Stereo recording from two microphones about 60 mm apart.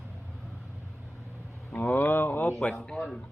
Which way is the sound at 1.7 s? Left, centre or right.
Left.